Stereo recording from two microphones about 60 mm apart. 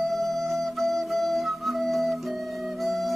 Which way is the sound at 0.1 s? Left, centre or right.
Centre.